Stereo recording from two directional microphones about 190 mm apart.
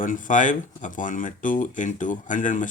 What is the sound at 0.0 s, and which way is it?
A man's voice, 45° left (ahead or behind).